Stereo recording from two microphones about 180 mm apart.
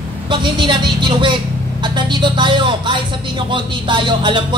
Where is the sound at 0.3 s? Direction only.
25° right (ahead or behind).